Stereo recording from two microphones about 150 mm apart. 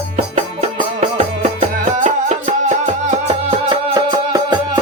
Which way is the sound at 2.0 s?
60° right (ahead or behind).